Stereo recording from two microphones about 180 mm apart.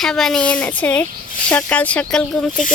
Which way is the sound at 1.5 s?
10° left (ahead or behind).